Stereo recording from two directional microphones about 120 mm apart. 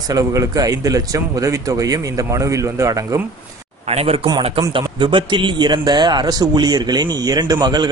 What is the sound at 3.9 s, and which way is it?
A man's voice, 55° right (ahead or behind).